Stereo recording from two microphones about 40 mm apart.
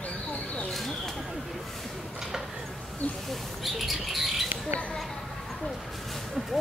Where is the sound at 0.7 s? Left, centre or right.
Centre.